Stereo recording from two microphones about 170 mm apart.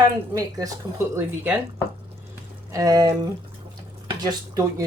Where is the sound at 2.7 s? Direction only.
20° right (ahead or behind).